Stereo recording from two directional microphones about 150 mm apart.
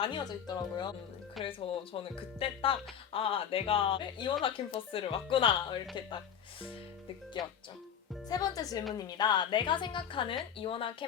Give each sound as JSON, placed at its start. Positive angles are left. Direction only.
{"t": 0.0, "sound": "speech", "side_deg": 30}
{"t": 1.5, "sound": "speech", "side_deg": 35}
{"t": 8.3, "sound": "speech", "side_deg": 25}